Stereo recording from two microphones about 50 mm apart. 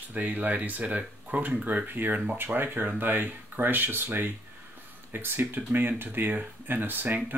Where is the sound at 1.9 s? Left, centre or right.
Right.